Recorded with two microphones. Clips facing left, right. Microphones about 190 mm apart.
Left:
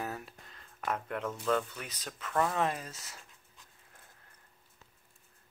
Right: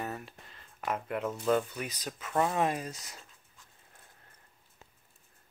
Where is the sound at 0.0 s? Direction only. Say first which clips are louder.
Right 1 dB; centre (ahead or behind); by 3.2 s 15° right (ahead or behind).